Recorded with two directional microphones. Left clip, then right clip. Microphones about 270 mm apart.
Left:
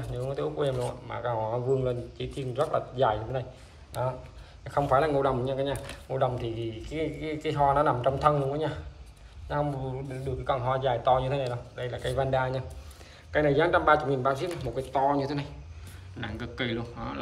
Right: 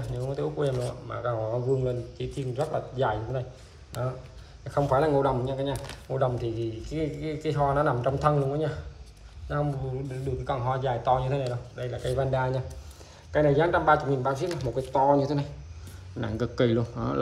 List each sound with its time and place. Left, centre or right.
0.0 s a man's voice: centre
4.6 s a man's voice: centre
14.9 s a man's voice: centre